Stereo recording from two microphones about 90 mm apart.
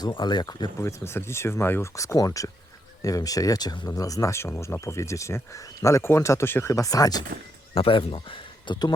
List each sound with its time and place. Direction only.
0.0 s speech: 55° left (ahead or behind)
0.8 s speech: 30° left (ahead or behind)
7.7 s speech: 80° left; by 8.9 s 60° left (ahead or behind)